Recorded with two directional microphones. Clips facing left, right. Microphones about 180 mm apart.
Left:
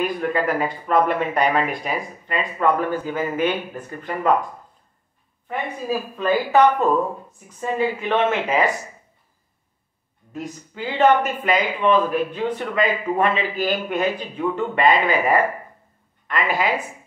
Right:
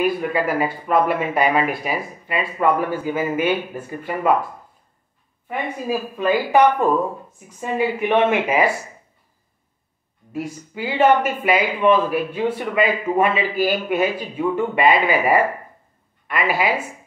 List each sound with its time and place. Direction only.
0.0 s speech: 5° right (ahead or behind)
5.5 s speech: 15° right (ahead or behind)
10.3 s speech: 10° right (ahead or behind)